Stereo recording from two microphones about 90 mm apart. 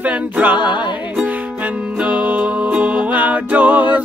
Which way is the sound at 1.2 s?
15° right (ahead or behind).